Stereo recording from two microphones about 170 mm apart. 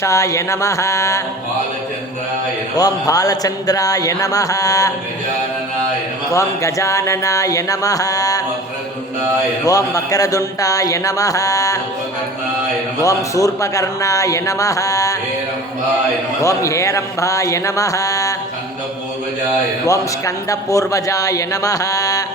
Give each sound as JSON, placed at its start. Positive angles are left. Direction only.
{"t": 0.0, "sound": "a sound", "side_deg": 15}
{"t": 2.7, "sound": "a man's voice", "side_deg": 20}
{"t": 6.3, "sound": "a man's voice", "side_deg": 20}
{"t": 9.6, "sound": "a man's voice", "side_deg": 20}
{"t": 13.0, "sound": "a man's voice", "side_deg": 20}
{"t": 16.4, "sound": "a man's voice", "side_deg": 20}
{"t": 19.9, "sound": "a man's voice", "side_deg": 20}